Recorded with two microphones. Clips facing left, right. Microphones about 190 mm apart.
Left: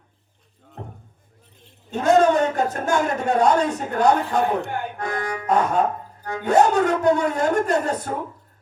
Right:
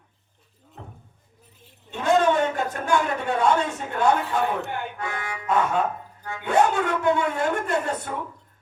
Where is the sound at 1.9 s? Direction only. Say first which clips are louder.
Left 4 dB; 45° left (ahead or behind).